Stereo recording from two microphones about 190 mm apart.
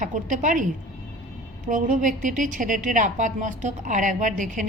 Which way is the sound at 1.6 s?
45° right (ahead or behind).